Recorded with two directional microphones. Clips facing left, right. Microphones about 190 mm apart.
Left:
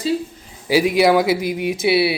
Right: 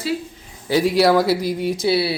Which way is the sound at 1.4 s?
55° left (ahead or behind).